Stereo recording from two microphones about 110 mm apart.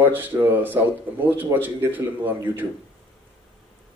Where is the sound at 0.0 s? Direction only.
15° right (ahead or behind).